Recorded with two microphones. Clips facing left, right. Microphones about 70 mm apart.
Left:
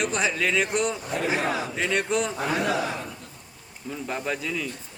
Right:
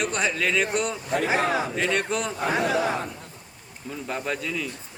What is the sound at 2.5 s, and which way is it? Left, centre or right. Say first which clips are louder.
Speech: right 5 dB; right.